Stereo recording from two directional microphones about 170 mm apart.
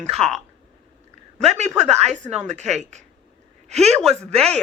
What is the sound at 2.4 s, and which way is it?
A woman's voice, 40° right (ahead or behind).